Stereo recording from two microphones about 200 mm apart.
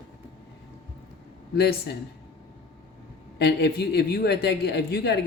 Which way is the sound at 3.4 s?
55° left (ahead or behind).